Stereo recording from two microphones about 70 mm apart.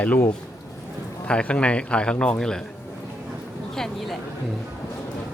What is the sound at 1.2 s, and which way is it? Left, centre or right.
A man's voice, centre.